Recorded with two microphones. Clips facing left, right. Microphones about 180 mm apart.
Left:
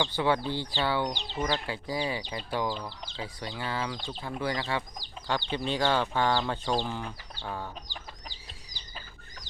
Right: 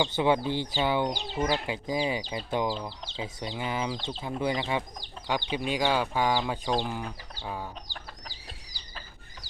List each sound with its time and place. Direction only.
0.0 s speech: 15° right (ahead or behind)